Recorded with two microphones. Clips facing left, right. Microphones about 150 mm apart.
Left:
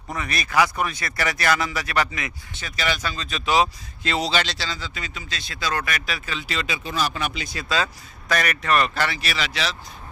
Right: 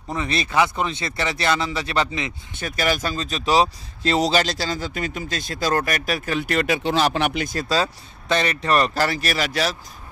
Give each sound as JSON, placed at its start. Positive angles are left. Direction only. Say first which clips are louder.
{"t": 0.1, "sound": "speech", "louder": "right 2 dB", "side_deg": -25}
{"t": 2.5, "sound": "speech", "louder": "right 5 dB", "side_deg": -50}
{"t": 7.6, "sound": "speech", "louder": "even", "side_deg": -35}